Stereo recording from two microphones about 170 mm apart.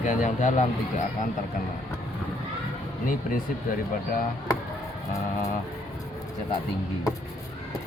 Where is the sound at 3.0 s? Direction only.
55° left (ahead or behind).